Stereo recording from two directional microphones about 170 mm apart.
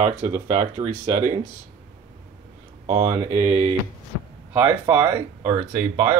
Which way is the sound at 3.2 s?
35° right (ahead or behind).